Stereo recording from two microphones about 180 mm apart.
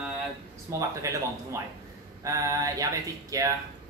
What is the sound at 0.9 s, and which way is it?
Speech, 15° right (ahead or behind).